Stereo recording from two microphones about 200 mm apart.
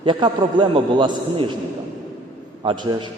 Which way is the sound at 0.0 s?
25° right (ahead or behind).